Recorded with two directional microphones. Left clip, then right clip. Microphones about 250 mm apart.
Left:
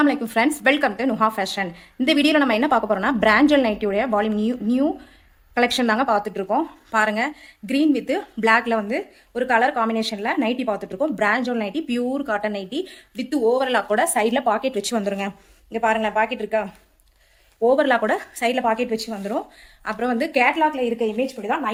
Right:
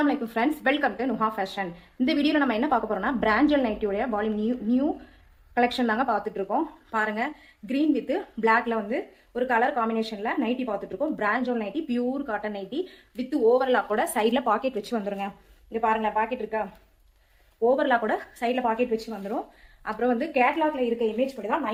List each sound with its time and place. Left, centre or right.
0.0 s a woman's voice: left
13.9 s speech: left
14.8 s a woman's voice: left